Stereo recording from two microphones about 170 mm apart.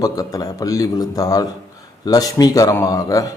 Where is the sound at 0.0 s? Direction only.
20° left (ahead or behind).